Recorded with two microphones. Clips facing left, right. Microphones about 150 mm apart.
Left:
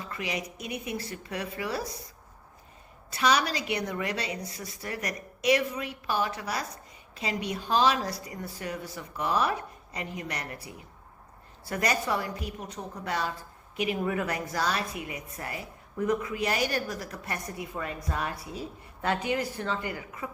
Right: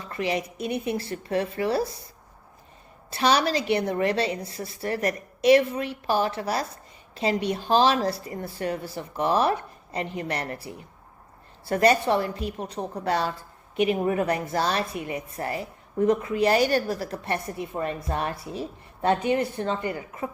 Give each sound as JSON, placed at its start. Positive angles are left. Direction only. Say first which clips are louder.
{"t": 0.1, "sound": "a woman's voice", "louder": "right 8 dB", "side_deg": -30}
{"t": 3.1, "sound": "a woman's voice", "louder": "right 4 dB", "side_deg": -30}